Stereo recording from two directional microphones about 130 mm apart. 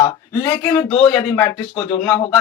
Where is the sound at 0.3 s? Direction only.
15° left (ahead or behind).